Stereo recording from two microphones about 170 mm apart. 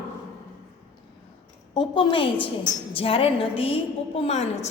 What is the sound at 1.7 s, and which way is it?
A woman's voice, 30° left (ahead or behind).